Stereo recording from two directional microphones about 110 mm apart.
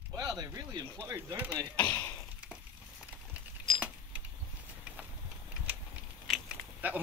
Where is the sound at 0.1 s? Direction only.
35° right (ahead or behind).